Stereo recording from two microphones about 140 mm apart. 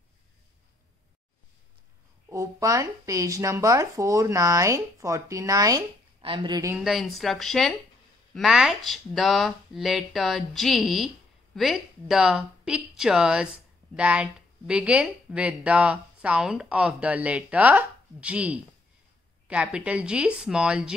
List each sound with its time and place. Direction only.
2.2 s speech: 20° right (ahead or behind)
6.2 s a woman's voice: 35° right (ahead or behind)
6.8 s a woman's voice: centre (ahead or behind)